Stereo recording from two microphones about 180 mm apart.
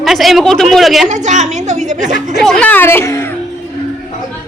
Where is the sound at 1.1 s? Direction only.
40° right (ahead or behind).